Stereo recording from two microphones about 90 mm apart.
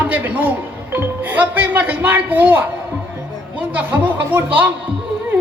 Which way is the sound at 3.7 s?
15° right (ahead or behind).